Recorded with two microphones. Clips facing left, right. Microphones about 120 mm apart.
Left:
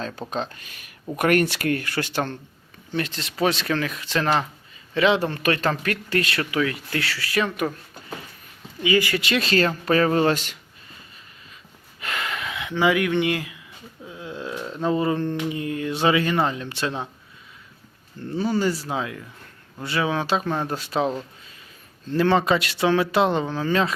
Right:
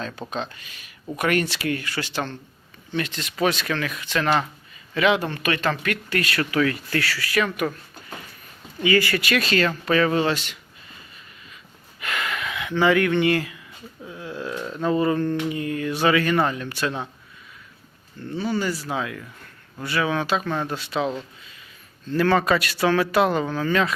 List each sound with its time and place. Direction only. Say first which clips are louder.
0.0 s speech: left 1 dB; 40° left (ahead or behind)
2.9 s speech: even; 35° left (ahead or behind)
8.8 s speech: right 1 dB; 15° left (ahead or behind); by 10.6 s 40° left (ahead or behind)
11.9 s gasp: right 1 dB; 30° left (ahead or behind)
12.7 s speech: right 1 dB; 10° left (ahead or behind)
18.3 s speech: left 2 dB; 35° left (ahead or behind)
22.1 s speech: even; 25° left (ahead or behind)